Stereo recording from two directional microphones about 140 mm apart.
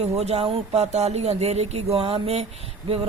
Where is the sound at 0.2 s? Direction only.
50° right (ahead or behind).